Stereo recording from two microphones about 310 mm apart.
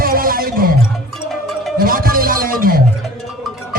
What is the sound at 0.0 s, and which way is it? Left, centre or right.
Music, right.